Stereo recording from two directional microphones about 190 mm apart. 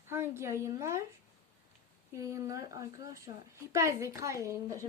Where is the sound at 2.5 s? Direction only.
20° right (ahead or behind).